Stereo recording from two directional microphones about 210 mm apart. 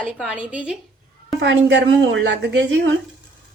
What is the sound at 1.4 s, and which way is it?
Speech, 55° right (ahead or behind).